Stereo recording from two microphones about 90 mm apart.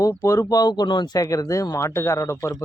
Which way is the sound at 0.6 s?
55° left (ahead or behind).